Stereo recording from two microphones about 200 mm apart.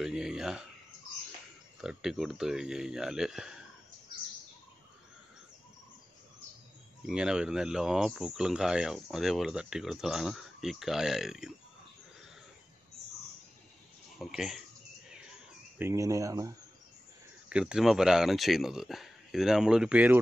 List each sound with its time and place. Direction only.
0.0 s speech: 5° right (ahead or behind)
1.8 s speech: 5° right (ahead or behind)
7.1 s speech: 5° right (ahead or behind)
14.1 s speech: centre (ahead or behind)
15.8 s speech: 15° right (ahead or behind)
17.5 s speech: 5° right (ahead or behind)